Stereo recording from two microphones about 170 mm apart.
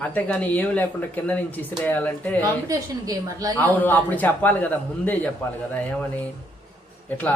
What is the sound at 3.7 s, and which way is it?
Speech, 10° left (ahead or behind).